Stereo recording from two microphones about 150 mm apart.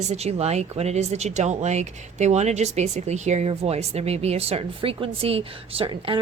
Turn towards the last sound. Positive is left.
turn(degrees=-40)  # may be behind; listen again after turning